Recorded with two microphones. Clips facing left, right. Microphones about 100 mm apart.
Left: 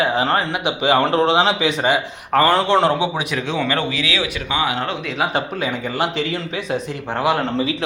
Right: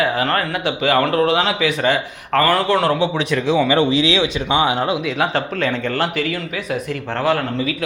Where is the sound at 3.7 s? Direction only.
20° right (ahead or behind).